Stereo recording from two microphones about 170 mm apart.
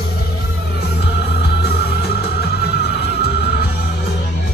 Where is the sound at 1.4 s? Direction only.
75° left (ahead or behind).